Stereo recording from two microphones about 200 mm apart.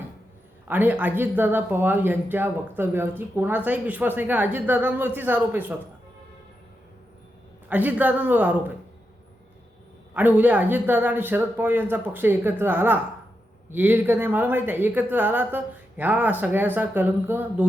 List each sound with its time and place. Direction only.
0.7 s speech: 10° right (ahead or behind)
7.7 s speech: 10° right (ahead or behind)
10.2 s speech: 10° right (ahead or behind)